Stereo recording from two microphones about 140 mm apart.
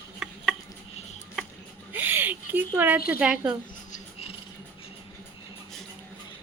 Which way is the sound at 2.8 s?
10° right (ahead or behind).